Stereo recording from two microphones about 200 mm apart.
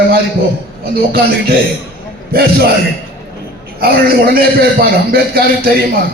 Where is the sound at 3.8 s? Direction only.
50° right (ahead or behind).